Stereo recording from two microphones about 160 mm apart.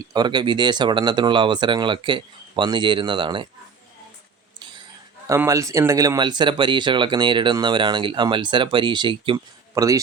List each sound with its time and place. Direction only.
0.0 s speech: 25° right (ahead or behind)
5.3 s speech: 20° right (ahead or behind)